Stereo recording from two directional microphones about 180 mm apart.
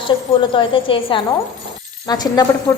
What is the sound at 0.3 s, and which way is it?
A woman's voice, 25° left (ahead or behind).